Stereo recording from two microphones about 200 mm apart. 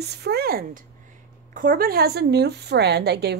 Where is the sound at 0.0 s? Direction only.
55° right (ahead or behind).